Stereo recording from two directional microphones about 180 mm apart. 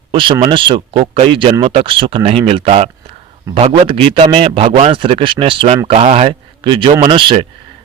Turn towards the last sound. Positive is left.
turn(degrees=-25)  # may be behind; listen again after turning